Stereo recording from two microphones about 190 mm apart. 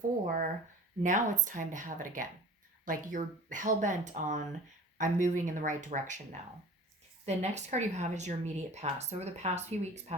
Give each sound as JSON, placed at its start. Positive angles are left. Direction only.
{"t": 0.3, "sound": "a sound", "side_deg": -45}
{"t": 1.0, "sound": "speech", "side_deg": -40}
{"t": 7.3, "sound": "speech", "side_deg": -35}